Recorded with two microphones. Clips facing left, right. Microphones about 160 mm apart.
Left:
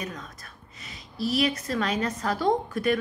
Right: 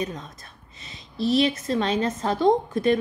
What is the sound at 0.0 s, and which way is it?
A woman's voice, 25° right (ahead or behind).